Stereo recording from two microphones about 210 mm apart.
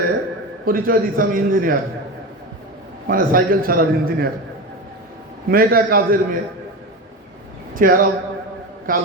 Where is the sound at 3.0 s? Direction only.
45° right (ahead or behind).